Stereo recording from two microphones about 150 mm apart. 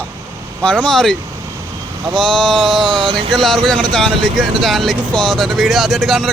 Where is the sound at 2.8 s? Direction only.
35° right (ahead or behind).